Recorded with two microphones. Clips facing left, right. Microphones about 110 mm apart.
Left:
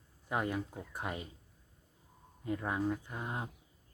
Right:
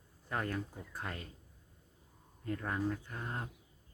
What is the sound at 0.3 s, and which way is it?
Speech, 15° left (ahead or behind).